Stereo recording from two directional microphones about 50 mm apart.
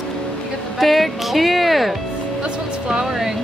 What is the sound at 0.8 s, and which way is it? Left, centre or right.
Speech, centre.